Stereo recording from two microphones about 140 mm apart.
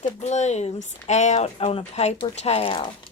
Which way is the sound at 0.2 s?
55° left (ahead or behind).